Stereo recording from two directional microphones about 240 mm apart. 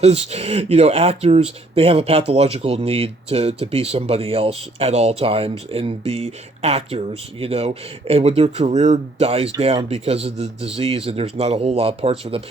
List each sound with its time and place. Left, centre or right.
0.0 s speech: right